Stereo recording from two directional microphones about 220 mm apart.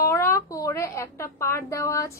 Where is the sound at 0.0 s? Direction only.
15° left (ahead or behind).